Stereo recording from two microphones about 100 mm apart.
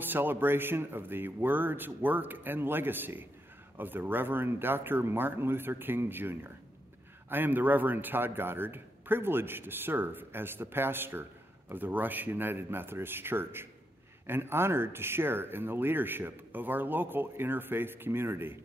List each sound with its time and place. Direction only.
0.0 s speech: 20° right (ahead or behind)